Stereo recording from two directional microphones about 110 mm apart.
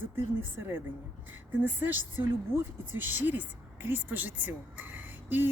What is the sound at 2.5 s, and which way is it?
Speech, 30° left (ahead or behind).